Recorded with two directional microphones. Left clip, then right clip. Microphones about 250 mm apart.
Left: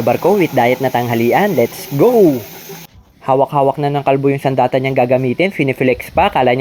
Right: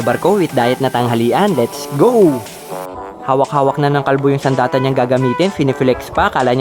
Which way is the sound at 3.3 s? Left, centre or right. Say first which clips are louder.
Left 1 dB; centre.